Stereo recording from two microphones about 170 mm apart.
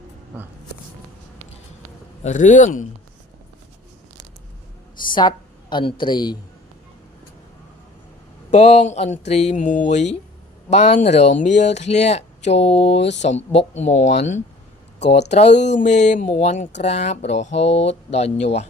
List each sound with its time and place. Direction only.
2.2 s speech: 45° left (ahead or behind)
5.0 s a woman's voice: 25° left (ahead or behind)
8.4 s speech: 40° left (ahead or behind)